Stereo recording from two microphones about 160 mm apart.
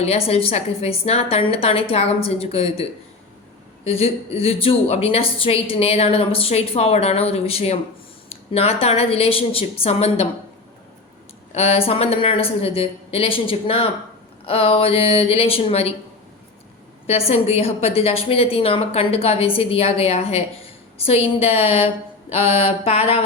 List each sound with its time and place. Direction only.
0.0 s a woman's voice: 40° left (ahead or behind)
3.8 s a woman's voice: 40° left (ahead or behind)
11.5 s a woman's voice: 40° left (ahead or behind)
17.1 s a woman's voice: 40° left (ahead or behind)